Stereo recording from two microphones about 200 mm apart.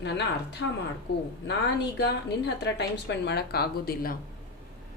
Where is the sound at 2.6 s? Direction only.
60° left (ahead or behind).